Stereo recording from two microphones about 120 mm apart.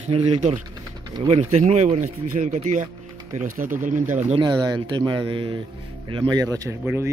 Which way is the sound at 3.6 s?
90° right.